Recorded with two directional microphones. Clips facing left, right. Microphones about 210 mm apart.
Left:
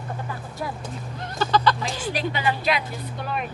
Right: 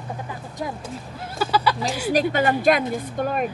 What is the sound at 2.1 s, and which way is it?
A woman's voice, 50° right (ahead or behind).